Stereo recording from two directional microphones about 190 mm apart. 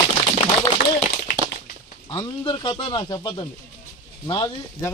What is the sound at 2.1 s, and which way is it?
Speech, 25° left (ahead or behind).